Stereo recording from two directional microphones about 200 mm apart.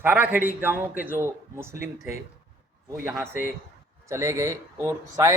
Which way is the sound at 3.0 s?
10° right (ahead or behind).